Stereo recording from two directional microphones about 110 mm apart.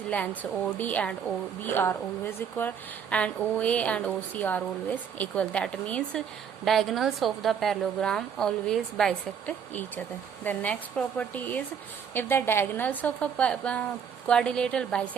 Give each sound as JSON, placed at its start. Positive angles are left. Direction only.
{"t": 0.4, "sound": "a woman's voice", "side_deg": 10}